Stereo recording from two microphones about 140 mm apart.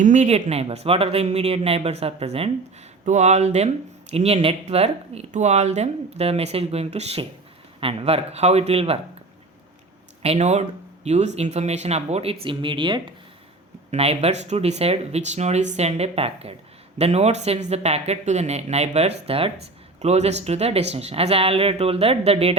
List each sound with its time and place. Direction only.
0.0 s speech: 60° right (ahead or behind)
10.2 s speech: 50° right (ahead or behind); by 13.1 s 35° right (ahead or behind)
13.9 s speech: 45° right (ahead or behind)